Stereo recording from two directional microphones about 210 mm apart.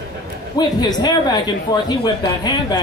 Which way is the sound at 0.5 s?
20° left (ahead or behind).